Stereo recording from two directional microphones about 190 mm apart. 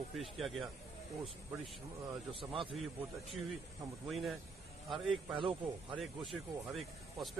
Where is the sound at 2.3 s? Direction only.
30° right (ahead or behind).